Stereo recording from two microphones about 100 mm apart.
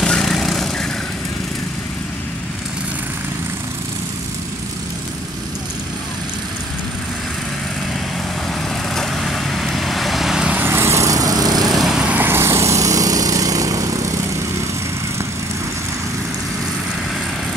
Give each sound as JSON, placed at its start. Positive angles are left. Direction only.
{"t": 0.0, "sound": "a sound", "side_deg": 5}
{"t": 8.9, "sound": "vehicle", "side_deg": 5}
{"t": 10.6, "sound": "lawn mower", "side_deg": -25}
{"t": 11.7, "sound": "lawn mower", "side_deg": -5}